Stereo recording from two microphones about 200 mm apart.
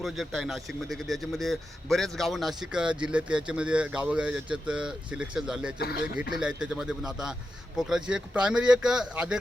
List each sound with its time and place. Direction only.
0.0 s a man's voice: centre (ahead or behind)
5.8 s speech: 50° left (ahead or behind)
6.6 s a man's voice: 5° right (ahead or behind)